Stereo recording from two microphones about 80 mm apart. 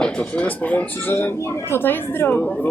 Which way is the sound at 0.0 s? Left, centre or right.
Centre.